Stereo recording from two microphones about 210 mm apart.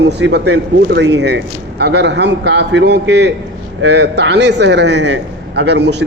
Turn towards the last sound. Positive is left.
turn(degrees=-55)  # may be behind; listen again after turning